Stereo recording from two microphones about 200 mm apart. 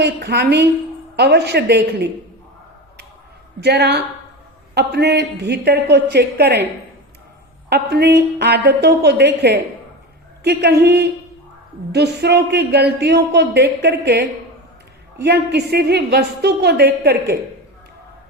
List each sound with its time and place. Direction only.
0.0 s speech: 55° right (ahead or behind)
3.6 s speech: 55° right (ahead or behind)
7.7 s speech: 55° right (ahead or behind)